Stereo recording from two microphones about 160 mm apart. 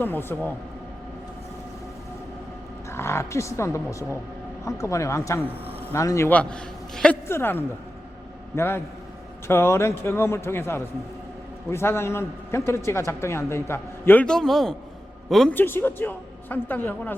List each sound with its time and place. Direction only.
0.0 s a man's voice: 15° left (ahead or behind)
2.9 s a man's voice: 15° left (ahead or behind)
15.5 s a man's voice: 15° left (ahead or behind)